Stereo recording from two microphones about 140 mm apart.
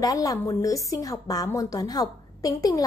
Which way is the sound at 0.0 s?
25° left (ahead or behind).